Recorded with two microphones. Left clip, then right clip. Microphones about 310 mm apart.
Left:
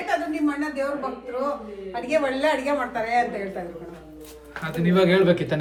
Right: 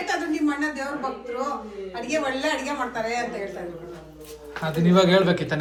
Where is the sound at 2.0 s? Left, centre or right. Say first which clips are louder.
Left 3 dB; centre.